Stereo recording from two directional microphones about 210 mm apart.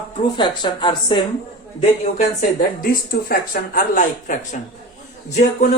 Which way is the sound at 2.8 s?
45° left (ahead or behind).